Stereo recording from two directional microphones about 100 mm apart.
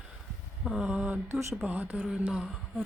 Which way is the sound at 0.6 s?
5° right (ahead or behind).